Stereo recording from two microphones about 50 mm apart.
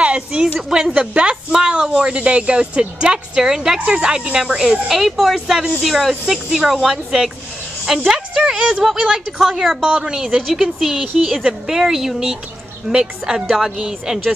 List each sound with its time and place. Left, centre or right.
0.0 s a woman's voice: right
0.6 s speech: centre
0.9 s a woman's voice: right
1.3 s speech: centre
8.5 s a woman's voice: right
9.0 s speech: centre
9.8 s speech: centre